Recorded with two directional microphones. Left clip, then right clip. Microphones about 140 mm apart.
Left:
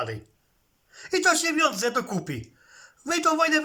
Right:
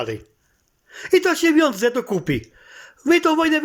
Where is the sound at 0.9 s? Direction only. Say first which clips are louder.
Right 5 dB; 15° right (ahead or behind).